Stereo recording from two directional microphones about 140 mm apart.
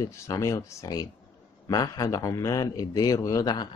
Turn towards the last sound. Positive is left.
turn(degrees=25)  # may be behind; listen again after turning